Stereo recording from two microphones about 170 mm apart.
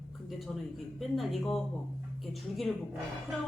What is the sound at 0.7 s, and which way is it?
Speech, centre (ahead or behind).